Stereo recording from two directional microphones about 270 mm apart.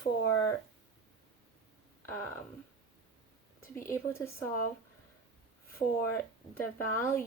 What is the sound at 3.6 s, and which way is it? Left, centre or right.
Speech, centre.